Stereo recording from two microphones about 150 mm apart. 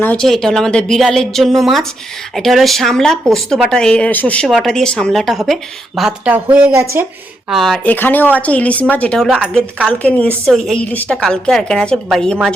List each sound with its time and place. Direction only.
0.0 s speech: 5° left (ahead or behind); by 7.0 s 15° right (ahead or behind)
7.5 s speech: centre (ahead or behind)
7.9 s a woman's voice: 10° left (ahead or behind)